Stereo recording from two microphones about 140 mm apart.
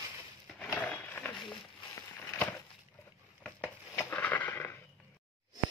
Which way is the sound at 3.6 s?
15° left (ahead or behind).